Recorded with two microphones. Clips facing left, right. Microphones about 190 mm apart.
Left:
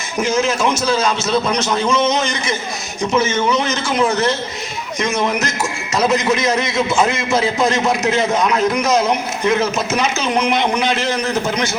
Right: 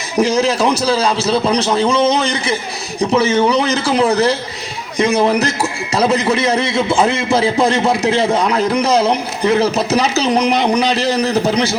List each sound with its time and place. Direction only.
0.2 s speech: 35° right (ahead or behind)